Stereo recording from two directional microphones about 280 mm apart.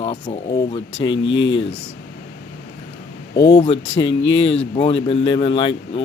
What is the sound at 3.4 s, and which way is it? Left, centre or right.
Speech, centre.